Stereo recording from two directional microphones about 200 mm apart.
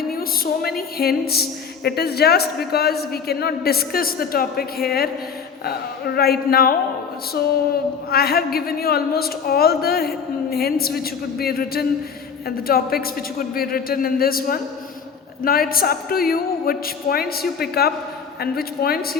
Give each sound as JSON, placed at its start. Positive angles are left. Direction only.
{"t": 0.1, "sound": "a sound", "side_deg": 50}
{"t": 0.8, "sound": "a woman's voice", "side_deg": 50}
{"t": 8.1, "sound": "a woman's voice", "side_deg": 50}